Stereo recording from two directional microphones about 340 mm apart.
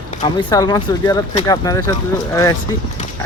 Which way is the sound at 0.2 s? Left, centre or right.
Centre.